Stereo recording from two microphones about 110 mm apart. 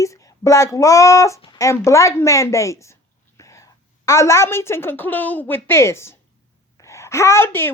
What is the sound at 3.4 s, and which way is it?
Whispering, 30° left (ahead or behind).